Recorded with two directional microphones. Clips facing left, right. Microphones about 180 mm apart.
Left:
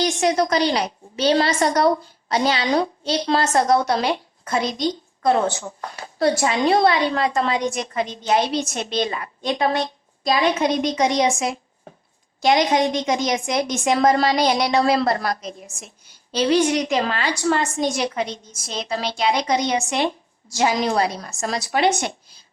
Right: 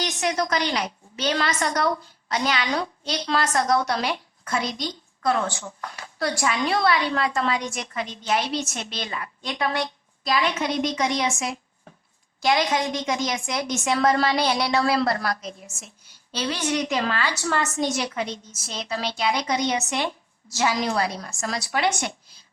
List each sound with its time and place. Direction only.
0.0 s a woman's voice: 30° left (ahead or behind)
12.4 s a woman's voice: 20° left (ahead or behind)